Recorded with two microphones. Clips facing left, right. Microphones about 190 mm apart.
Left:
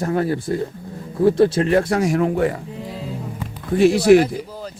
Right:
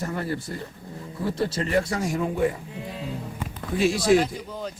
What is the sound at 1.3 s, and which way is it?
Speech, 80° left.